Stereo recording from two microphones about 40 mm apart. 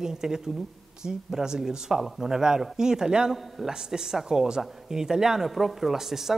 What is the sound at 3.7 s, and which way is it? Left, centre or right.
Speech, centre.